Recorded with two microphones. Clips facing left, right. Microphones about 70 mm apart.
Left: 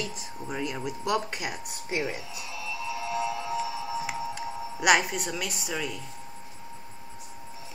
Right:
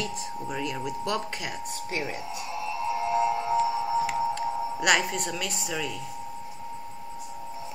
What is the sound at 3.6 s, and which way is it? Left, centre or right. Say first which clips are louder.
Music: right 6 dB; right.